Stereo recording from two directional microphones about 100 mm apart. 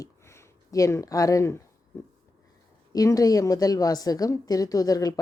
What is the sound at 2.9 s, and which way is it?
A woman's voice, 35° left (ahead or behind).